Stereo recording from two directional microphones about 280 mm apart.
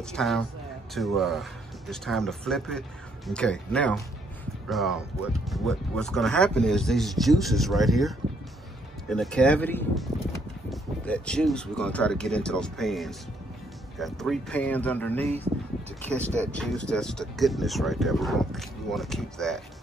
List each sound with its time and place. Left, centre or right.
0.0 s speech: centre
15.2 s speech: right
16.5 s speech: centre